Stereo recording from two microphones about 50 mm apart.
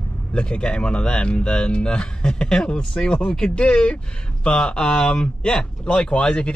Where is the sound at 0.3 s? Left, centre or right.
Centre.